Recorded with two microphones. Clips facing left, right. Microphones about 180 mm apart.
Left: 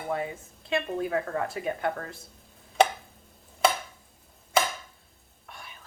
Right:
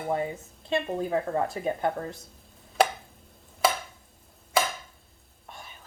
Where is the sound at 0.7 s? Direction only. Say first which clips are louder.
Right 1 dB; 25° right (ahead or behind).